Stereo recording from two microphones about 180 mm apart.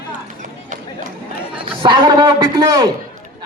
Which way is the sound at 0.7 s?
45° right (ahead or behind).